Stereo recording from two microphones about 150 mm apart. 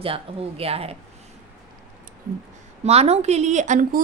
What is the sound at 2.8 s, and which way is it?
A woman's voice, 45° right (ahead or behind).